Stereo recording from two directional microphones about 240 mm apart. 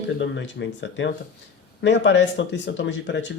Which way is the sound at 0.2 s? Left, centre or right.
Left.